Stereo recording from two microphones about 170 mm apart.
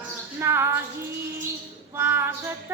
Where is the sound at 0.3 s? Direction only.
15° right (ahead or behind).